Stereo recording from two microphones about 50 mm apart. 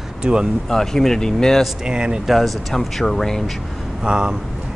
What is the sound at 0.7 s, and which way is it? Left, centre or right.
Speech, centre.